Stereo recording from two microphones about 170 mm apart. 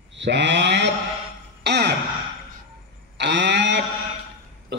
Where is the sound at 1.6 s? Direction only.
80° right.